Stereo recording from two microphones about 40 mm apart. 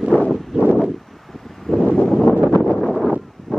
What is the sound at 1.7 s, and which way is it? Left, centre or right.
Wind, centre.